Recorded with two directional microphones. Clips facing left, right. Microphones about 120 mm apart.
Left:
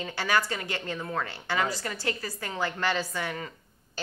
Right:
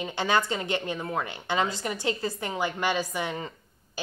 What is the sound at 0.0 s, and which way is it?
A woman's voice, 20° right (ahead or behind).